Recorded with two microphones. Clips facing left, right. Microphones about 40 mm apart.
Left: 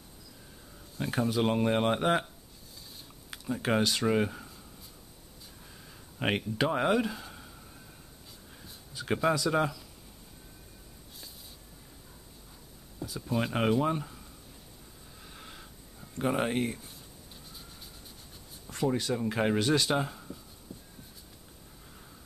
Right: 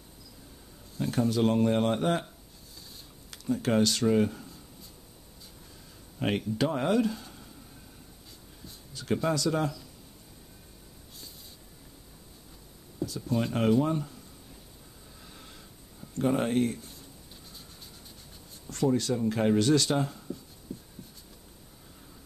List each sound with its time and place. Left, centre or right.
0.9 s speech: centre
3.3 s speech: centre
6.1 s speech: left
8.6 s speech: centre
13.0 s speech: centre
15.2 s a sound: centre
18.7 s speech: centre
20.7 s a sound: centre